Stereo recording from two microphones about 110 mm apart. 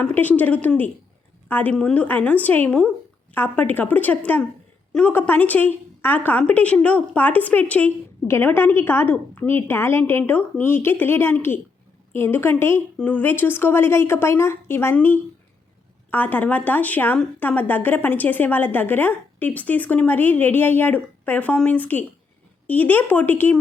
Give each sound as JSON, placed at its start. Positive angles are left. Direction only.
{"t": 0.0, "sound": "a woman's voice", "side_deg": 15}
{"t": 16.0, "sound": "a woman's voice", "side_deg": 15}